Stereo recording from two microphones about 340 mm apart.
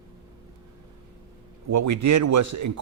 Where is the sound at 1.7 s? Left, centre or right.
Right.